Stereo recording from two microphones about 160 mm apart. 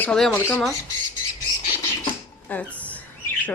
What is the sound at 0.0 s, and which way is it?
Speech, 5° left (ahead or behind).